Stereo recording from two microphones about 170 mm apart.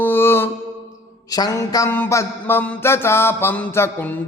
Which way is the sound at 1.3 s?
20° left (ahead or behind).